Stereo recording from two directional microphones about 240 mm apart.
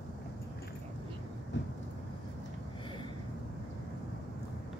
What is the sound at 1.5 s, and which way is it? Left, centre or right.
Thunder, left.